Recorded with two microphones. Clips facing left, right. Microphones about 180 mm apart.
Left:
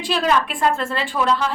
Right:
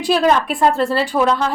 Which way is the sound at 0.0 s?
40° right (ahead or behind).